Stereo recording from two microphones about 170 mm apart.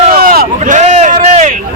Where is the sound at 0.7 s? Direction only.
40° right (ahead or behind).